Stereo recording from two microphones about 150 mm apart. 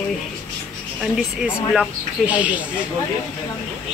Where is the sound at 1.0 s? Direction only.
5° right (ahead or behind).